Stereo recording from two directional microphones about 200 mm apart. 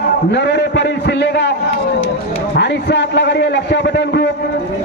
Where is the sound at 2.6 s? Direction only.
60° left (ahead or behind).